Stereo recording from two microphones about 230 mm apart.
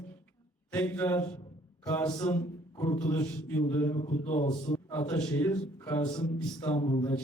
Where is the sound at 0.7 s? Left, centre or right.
Centre.